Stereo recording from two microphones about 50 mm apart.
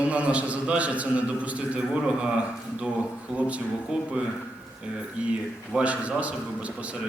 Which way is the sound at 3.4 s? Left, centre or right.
Right.